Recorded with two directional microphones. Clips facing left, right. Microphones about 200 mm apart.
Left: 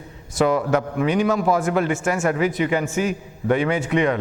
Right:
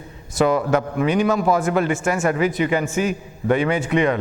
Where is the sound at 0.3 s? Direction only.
15° right (ahead or behind).